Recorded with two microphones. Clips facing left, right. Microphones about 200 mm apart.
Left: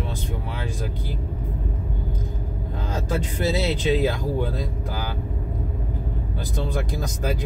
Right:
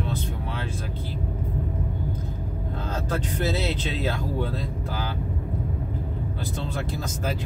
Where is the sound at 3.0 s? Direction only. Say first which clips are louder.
Left 2 dB; 10° left (ahead or behind).